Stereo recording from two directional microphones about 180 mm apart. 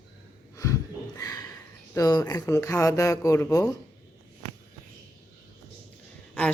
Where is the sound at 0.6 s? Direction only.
20° left (ahead or behind).